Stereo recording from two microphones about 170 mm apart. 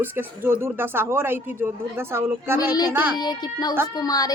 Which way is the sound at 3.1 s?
25° left (ahead or behind).